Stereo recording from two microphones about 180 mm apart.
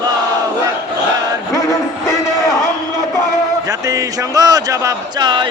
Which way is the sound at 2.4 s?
15° left (ahead or behind).